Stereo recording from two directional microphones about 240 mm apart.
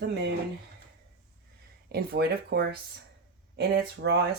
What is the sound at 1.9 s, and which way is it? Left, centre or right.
Speech, right.